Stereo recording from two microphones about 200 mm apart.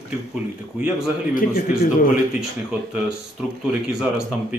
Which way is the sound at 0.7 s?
5° right (ahead or behind).